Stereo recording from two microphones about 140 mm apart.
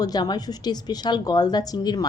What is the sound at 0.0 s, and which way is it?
A woman's voice, 30° left (ahead or behind).